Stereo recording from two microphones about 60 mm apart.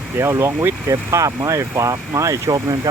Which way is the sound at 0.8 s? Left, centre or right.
Right.